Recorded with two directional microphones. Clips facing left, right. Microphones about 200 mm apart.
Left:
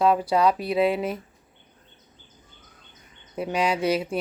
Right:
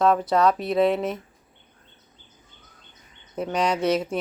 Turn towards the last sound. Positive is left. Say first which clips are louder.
# right 1 dB
turn(degrees=5)  # may be behind; listen again after turning